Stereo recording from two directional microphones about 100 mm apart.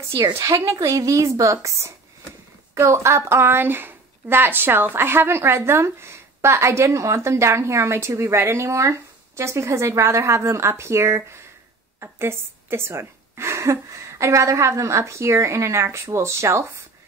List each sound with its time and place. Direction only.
0.1 s a woman's voice: 30° right (ahead or behind)